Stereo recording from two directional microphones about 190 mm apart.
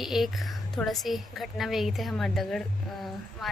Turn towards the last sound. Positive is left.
turn(degrees=0)  # may be behind; listen again after turning